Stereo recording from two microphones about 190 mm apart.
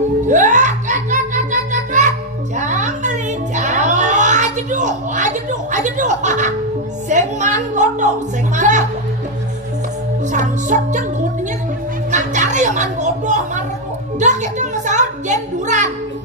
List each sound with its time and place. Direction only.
0.3 s music: 40° right (ahead or behind)
7.1 s a sound: 40° right (ahead or behind)
8.5 s music: 40° right (ahead or behind)
10.2 s music: 40° right (ahead or behind)
12.1 s a sound: 40° right (ahead or behind)
14.2 s music: 40° right (ahead or behind)